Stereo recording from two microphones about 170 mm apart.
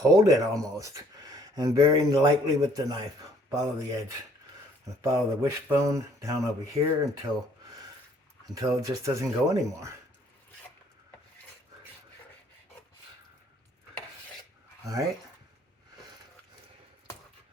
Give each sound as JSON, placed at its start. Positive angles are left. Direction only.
{"t": 0.0, "sound": "speech", "side_deg": -20}
{"t": 5.0, "sound": "speech", "side_deg": -15}
{"t": 8.4, "sound": "speech", "side_deg": -20}